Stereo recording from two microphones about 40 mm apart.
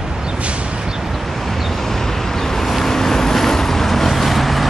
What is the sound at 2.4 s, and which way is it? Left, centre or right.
Vehicle, centre.